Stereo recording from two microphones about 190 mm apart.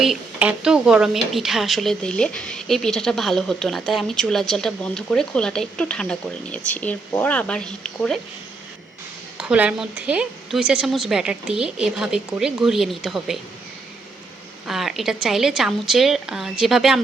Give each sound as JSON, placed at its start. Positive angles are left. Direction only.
{"t": 0.0, "sound": "speech", "side_deg": -5}
{"t": 9.4, "sound": "speech", "side_deg": -5}
{"t": 14.7, "sound": "speech", "side_deg": 0}